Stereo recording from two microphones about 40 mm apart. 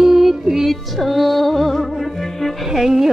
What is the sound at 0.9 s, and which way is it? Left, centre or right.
Music, centre.